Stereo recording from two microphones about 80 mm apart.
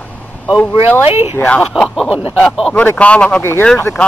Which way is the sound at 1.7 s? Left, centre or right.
Centre.